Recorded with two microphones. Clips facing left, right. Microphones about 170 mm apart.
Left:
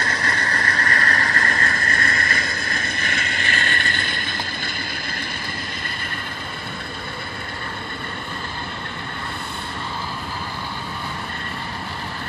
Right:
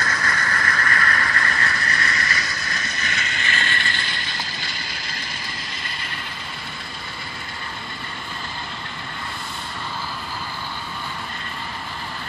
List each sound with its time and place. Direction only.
0.0 s vehicle: 30° left (ahead or behind); by 4.7 s 50° left (ahead or behind)